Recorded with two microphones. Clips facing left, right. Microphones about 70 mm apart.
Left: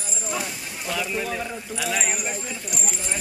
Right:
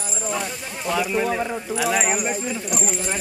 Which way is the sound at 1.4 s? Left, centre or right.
Right.